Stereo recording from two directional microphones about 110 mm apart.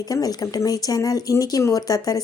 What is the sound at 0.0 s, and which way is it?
Speech, 35° left (ahead or behind).